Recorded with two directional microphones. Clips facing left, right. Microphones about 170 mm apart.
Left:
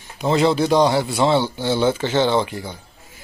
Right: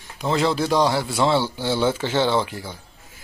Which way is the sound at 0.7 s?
20° left (ahead or behind).